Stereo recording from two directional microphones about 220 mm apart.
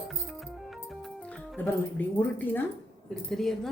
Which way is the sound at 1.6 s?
10° left (ahead or behind).